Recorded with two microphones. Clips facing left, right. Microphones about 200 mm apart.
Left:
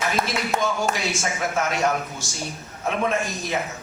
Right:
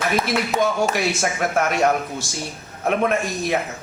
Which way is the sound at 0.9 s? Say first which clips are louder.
Right 5 dB; 60° right (ahead or behind).